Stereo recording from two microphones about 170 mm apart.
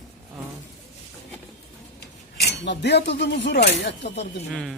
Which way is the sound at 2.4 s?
80° left.